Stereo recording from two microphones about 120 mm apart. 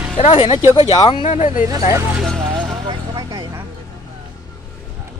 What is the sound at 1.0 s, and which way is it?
Speech, 40° left (ahead or behind).